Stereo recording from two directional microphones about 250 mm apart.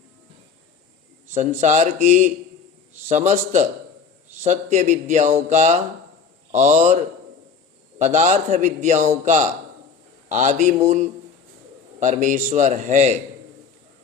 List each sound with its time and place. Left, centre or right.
1.3 s a man's voice: right